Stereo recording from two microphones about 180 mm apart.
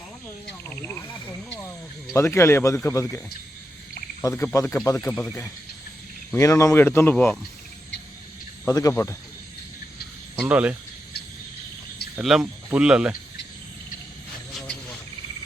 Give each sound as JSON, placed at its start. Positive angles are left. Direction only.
{"t": 0.7, "sound": "a sound", "side_deg": 10}
{"t": 2.1, "sound": "speech", "side_deg": 15}
{"t": 4.2, "sound": "speech", "side_deg": 15}
{"t": 6.3, "sound": "speech", "side_deg": 15}
{"t": 8.6, "sound": "speech", "side_deg": 15}
{"t": 10.4, "sound": "speech", "side_deg": -10}
{"t": 12.2, "sound": "speech", "side_deg": -5}